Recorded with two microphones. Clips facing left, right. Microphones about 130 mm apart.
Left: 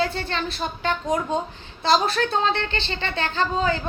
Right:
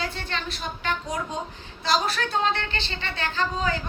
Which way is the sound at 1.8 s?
30° left (ahead or behind).